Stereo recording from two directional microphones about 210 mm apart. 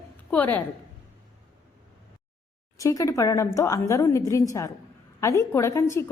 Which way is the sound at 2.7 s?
15° left (ahead or behind).